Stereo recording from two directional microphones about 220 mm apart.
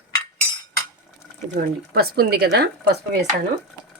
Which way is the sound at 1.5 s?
45° right (ahead or behind).